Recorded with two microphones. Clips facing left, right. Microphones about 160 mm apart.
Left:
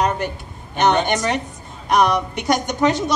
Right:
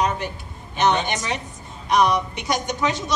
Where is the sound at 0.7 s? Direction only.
55° left (ahead or behind).